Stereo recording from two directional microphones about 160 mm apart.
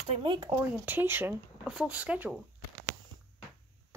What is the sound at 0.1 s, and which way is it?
Speech, 35° right (ahead or behind).